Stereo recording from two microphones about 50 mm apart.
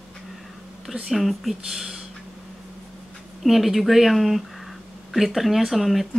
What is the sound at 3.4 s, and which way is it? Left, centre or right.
Speech, centre.